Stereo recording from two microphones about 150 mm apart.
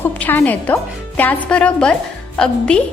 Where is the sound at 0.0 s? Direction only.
15° left (ahead or behind).